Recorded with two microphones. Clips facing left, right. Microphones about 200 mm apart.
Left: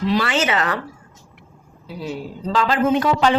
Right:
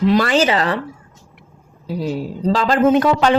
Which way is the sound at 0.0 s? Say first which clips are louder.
Right 5 dB; 45° right (ahead or behind).